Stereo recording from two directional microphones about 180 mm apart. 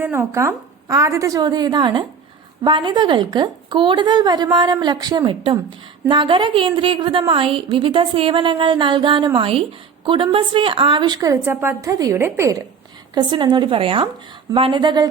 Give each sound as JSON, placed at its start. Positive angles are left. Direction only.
{"t": 0.0, "sound": "a woman's voice", "side_deg": -10}